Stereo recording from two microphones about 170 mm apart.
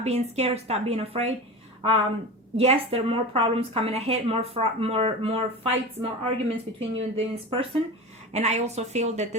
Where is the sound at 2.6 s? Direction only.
35° right (ahead or behind).